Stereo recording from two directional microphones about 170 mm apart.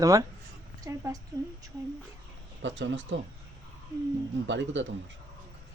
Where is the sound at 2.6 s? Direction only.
90° right.